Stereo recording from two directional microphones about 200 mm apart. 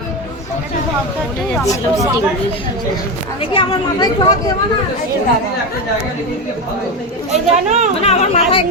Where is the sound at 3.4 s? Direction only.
25° left (ahead or behind).